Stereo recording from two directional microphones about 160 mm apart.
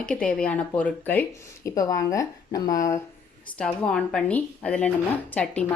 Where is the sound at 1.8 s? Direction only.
20° left (ahead or behind).